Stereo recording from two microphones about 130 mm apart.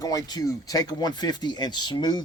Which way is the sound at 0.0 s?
25° left (ahead or behind).